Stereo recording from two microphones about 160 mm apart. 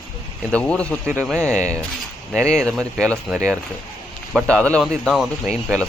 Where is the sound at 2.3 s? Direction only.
5° left (ahead or behind).